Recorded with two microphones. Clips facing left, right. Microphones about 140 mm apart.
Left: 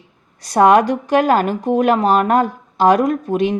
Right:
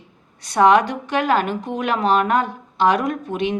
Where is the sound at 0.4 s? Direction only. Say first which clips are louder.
Left 3 dB; 40° left (ahead or behind).